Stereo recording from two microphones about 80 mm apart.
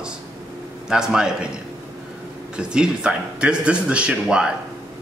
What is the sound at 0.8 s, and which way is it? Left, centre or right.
Speech, centre.